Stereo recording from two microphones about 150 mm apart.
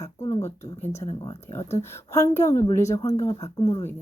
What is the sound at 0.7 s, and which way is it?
Speech, 20° left (ahead or behind).